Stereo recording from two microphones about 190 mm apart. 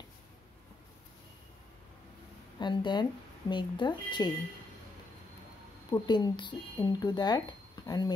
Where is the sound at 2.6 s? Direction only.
25° left (ahead or behind).